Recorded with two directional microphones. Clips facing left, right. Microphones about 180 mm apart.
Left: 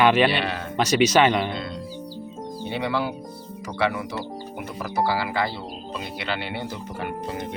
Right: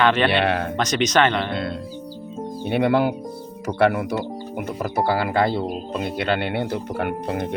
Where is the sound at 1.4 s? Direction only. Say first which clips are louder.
Right 4 dB; 60° right (ahead or behind).